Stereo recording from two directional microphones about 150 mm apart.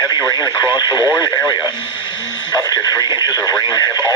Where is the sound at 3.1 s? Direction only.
25° left (ahead or behind).